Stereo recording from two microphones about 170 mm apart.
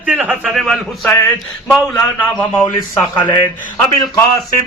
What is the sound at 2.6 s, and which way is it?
Speech, 15° left (ahead or behind).